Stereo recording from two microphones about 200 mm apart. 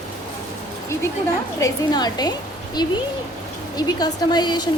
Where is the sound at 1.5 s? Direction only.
20° left (ahead or behind).